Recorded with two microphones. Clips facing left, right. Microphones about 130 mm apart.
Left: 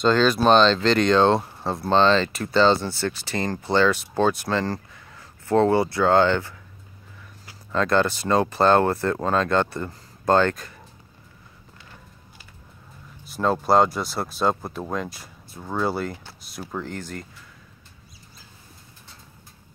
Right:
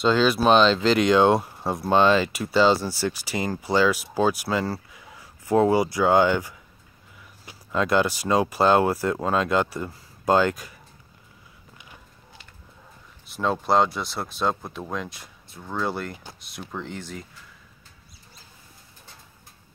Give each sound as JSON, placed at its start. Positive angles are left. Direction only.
{"t": 0.0, "sound": "speech", "side_deg": -5}
{"t": 13.3, "sound": "speech", "side_deg": 0}